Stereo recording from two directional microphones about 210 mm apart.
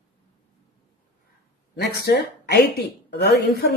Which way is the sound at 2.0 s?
50° left (ahead or behind).